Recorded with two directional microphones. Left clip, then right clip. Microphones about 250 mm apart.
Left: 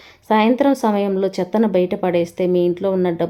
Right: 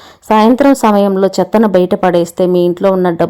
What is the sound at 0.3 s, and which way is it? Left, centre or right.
Speech, right.